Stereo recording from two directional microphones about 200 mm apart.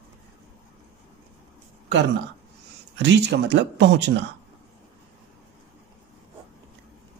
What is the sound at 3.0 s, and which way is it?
Speech, 60° right (ahead or behind).